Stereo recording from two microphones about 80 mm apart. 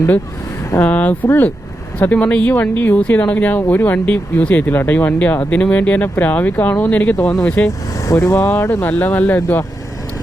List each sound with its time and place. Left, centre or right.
0.8 s speech: centre
8.0 s speech: left
8.4 s speech: left